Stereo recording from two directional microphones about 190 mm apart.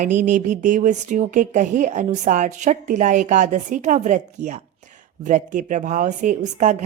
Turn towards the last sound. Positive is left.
turn(degrees=-40)  # may be behind; listen again after turning